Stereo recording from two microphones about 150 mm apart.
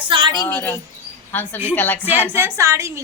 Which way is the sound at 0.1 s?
35° right (ahead or behind).